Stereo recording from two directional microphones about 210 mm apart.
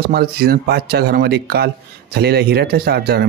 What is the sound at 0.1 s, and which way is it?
Speech, 45° right (ahead or behind).